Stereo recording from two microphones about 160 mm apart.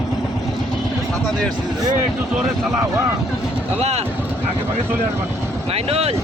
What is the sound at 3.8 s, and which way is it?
Speech, 40° right (ahead or behind).